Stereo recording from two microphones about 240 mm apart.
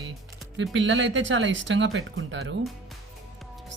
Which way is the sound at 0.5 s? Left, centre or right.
Right.